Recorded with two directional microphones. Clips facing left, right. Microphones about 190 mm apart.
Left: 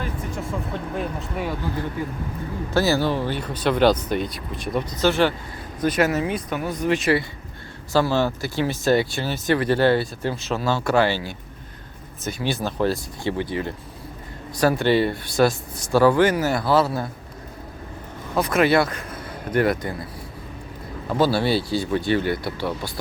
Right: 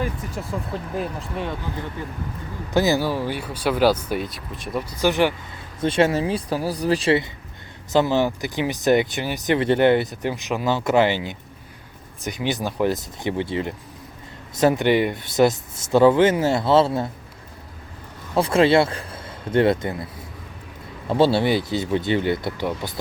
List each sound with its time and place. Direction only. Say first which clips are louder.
0.7 s speech: even; centre (ahead or behind)
2.7 s speech: right 1 dB; 15° right (ahead or behind)
5.8 s speech: right 1 dB; 30° right (ahead or behind)
7.9 s speech: right 1 dB; 20° right (ahead or behind)
18.3 s speech: right 2 dB; 30° right (ahead or behind)
21.1 s speech: right 2 dB; 25° right (ahead or behind)